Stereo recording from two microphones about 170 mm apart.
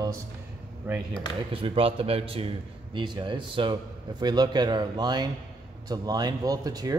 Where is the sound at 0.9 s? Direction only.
15° right (ahead or behind).